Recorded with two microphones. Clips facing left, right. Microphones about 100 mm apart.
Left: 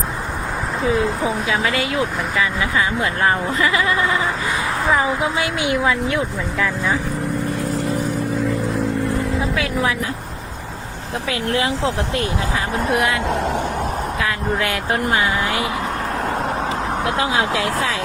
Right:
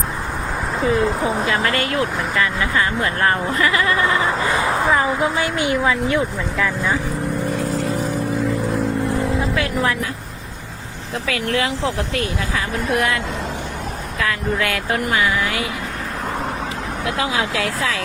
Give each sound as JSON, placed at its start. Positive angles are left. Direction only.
{"t": 0.8, "sound": "speech", "side_deg": 0}
{"t": 4.9, "sound": "speech", "side_deg": 0}
{"t": 9.4, "sound": "music", "side_deg": 0}
{"t": 11.3, "sound": "speech", "side_deg": 25}
{"t": 14.2, "sound": "speech", "side_deg": 20}
{"t": 17.0, "sound": "speech", "side_deg": 30}